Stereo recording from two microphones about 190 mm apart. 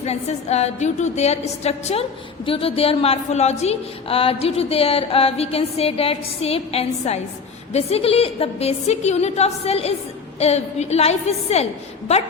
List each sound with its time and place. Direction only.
0.0 s a woman's voice: 35° left (ahead or behind)